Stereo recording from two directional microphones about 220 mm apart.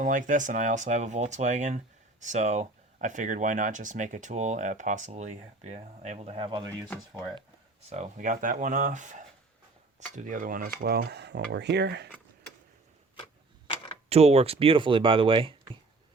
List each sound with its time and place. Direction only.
0.0 s speech: 35° right (ahead or behind); by 7.4 s 20° right (ahead or behind)
7.9 s speech: 30° right (ahead or behind); by 12.0 s 50° right (ahead or behind)
14.1 s speech: 30° right (ahead or behind)